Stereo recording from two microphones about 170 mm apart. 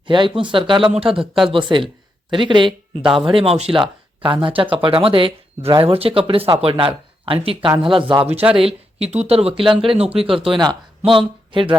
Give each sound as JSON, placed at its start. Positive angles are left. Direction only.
{"t": 0.1, "sound": "speech", "side_deg": -30}
{"t": 8.3, "sound": "speech", "side_deg": -10}
{"t": 8.5, "sound": "speech", "side_deg": -35}